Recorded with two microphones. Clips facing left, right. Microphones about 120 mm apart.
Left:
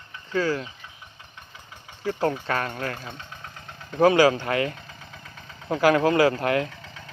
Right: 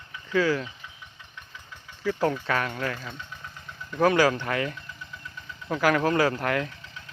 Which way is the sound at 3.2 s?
60° left (ahead or behind).